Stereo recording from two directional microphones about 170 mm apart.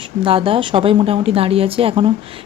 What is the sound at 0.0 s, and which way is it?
A woman's voice, 30° right (ahead or behind).